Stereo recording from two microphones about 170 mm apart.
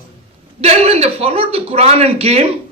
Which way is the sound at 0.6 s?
40° right (ahead or behind).